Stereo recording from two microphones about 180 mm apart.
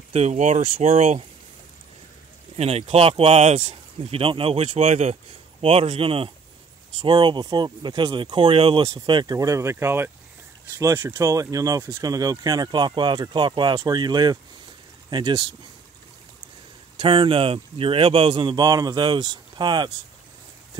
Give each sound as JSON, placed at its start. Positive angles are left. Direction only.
{"t": 0.1, "sound": "speech", "side_deg": -40}
{"t": 2.5, "sound": "speech", "side_deg": -35}
{"t": 16.9, "sound": "speech", "side_deg": -25}